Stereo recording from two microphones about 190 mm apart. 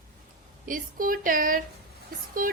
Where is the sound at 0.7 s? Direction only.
45° right (ahead or behind).